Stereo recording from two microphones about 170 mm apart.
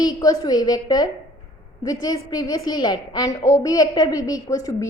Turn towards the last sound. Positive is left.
turn(degrees=20)  # may be behind; listen again after turning